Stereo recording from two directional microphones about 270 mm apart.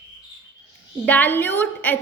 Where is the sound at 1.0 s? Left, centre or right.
Centre.